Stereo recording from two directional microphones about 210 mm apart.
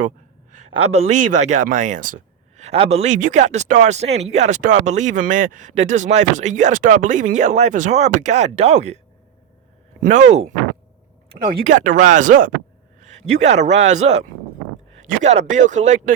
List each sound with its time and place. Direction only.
0.5 s speech: 35° right (ahead or behind)
10.0 s speech: 35° right (ahead or behind)
13.0 s a sound: 35° right (ahead or behind)
13.7 s speech: 35° right (ahead or behind)